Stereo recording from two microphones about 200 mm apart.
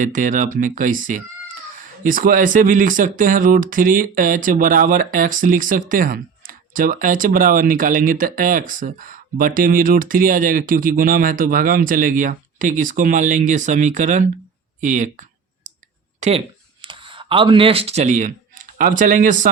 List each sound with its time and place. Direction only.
0.0 s speech: 40° right (ahead or behind)
16.2 s speech: 35° right (ahead or behind)
16.8 s speech: 25° right (ahead or behind); by 19.5 s 40° right (ahead or behind)